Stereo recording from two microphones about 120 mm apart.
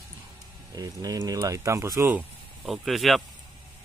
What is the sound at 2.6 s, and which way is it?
Speech, centre (ahead or behind).